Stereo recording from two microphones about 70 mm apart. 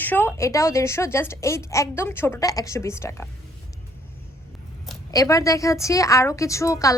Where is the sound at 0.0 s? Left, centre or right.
Left.